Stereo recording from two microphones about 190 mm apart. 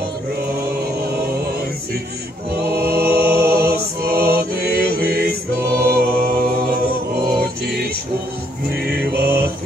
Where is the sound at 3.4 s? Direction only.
55° right (ahead or behind).